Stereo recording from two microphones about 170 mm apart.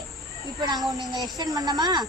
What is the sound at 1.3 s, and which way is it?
Speech, 20° right (ahead or behind).